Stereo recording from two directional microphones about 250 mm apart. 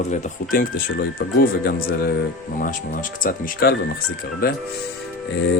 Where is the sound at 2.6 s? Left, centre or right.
Left.